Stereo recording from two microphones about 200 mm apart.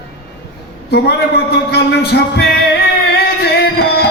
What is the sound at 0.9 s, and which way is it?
Speech, 55° left (ahead or behind).